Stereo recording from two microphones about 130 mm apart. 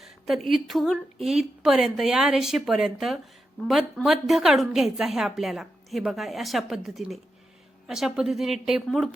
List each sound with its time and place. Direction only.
0.0 s a woman's voice: centre (ahead or behind)